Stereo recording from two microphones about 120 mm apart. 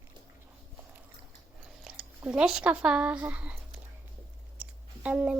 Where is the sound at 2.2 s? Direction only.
5° right (ahead or behind).